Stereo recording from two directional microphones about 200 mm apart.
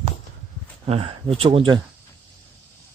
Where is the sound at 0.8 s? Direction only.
30° right (ahead or behind).